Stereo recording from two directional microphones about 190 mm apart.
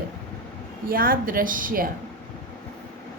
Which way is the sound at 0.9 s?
50° right (ahead or behind).